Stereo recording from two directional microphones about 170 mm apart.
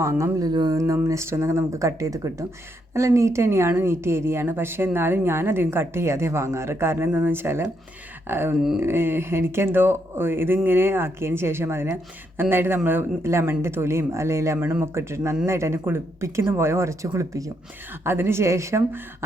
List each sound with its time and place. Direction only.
0.0 s speech: 15° right (ahead or behind)